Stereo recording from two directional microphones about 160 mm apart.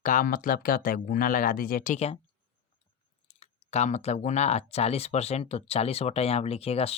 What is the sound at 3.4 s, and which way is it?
Speech, 45° left (ahead or behind).